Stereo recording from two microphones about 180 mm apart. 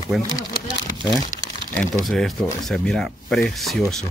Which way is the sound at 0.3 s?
20° left (ahead or behind).